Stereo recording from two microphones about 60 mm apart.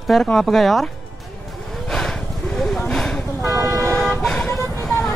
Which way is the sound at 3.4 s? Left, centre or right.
Right.